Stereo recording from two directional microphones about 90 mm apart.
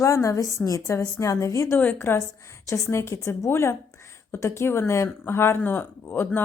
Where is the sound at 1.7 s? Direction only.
20° left (ahead or behind).